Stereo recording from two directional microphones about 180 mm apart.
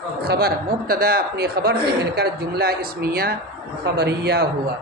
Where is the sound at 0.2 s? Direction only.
60° right (ahead or behind).